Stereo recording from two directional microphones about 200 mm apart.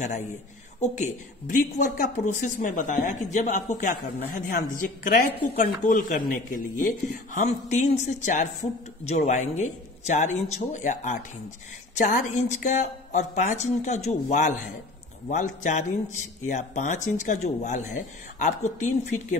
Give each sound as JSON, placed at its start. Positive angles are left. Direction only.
{"t": 0.7, "sound": "a woman's voice", "side_deg": 35}